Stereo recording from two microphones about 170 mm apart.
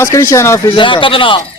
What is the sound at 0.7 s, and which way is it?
Speech, 30° left (ahead or behind).